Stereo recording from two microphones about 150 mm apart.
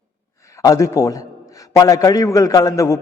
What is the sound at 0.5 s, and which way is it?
A man's voice, 20° left (ahead or behind).